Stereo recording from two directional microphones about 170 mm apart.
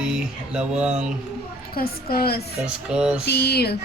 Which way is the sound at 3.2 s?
75° left (ahead or behind).